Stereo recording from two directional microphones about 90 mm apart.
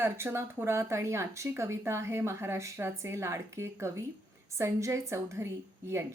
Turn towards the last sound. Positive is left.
turn(degrees=-30)  # may be behind; listen again after turning